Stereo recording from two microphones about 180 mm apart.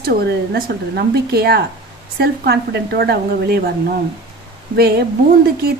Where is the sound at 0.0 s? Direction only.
60° right (ahead or behind).